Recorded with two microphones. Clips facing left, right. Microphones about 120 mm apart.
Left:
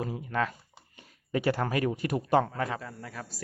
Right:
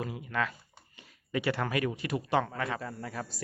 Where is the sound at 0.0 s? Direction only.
35° left (ahead or behind).